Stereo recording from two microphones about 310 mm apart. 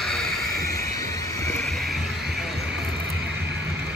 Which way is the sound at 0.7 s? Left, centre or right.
Centre.